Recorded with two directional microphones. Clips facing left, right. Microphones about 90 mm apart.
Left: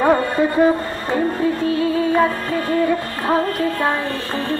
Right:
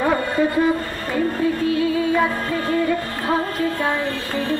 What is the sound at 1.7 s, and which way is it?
Speech, 35° left (ahead or behind).